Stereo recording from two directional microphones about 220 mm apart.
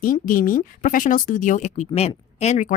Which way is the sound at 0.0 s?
40° left (ahead or behind).